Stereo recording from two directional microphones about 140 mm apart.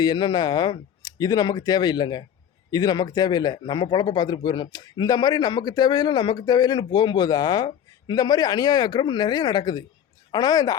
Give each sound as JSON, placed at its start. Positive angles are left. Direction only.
{"t": 0.0, "sound": "speech", "side_deg": 30}